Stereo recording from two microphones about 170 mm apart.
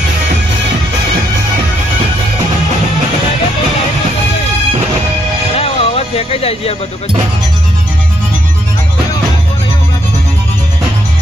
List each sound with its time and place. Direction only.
5.5 s music: 35° left (ahead or behind)